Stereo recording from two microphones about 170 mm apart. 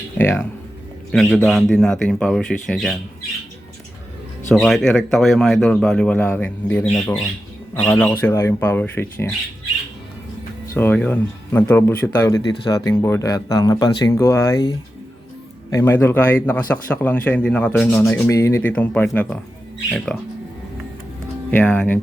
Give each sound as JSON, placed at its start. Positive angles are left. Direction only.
{"t": 0.2, "sound": "speech", "side_deg": 15}
{"t": 1.1, "sound": "speech", "side_deg": 0}
{"t": 4.5, "sound": "speech", "side_deg": 0}
{"t": 10.8, "sound": "speech", "side_deg": 10}
{"t": 15.7, "sound": "speech", "side_deg": 15}
{"t": 18.2, "sound": "speech", "side_deg": 15}
{"t": 21.5, "sound": "speech", "side_deg": 10}